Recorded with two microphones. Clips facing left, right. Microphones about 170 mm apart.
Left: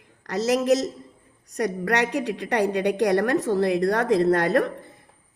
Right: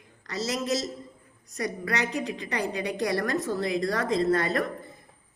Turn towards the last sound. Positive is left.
turn(degrees=70)  # may be behind; listen again after turning